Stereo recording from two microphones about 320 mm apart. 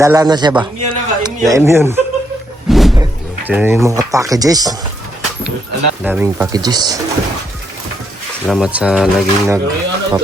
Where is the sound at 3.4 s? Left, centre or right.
Centre.